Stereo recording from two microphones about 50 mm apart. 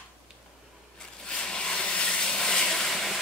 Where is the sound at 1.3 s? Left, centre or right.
Centre.